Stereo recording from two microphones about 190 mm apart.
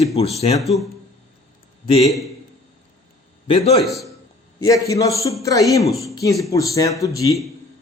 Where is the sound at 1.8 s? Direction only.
30° left (ahead or behind).